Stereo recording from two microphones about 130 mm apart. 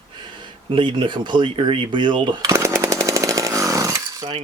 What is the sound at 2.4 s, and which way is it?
Chainsaw, 20° right (ahead or behind).